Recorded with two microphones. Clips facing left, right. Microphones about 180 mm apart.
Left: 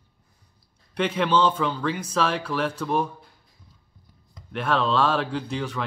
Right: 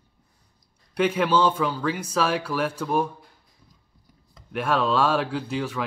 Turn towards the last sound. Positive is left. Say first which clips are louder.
# right 1 dB
turn(degrees=-5)  # may be behind; listen again after turning